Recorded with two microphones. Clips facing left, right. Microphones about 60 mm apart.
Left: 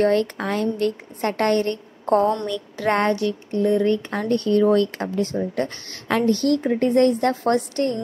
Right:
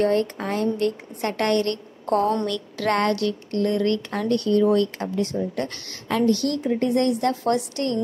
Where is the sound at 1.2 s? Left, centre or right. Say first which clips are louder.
Left 2 dB; left.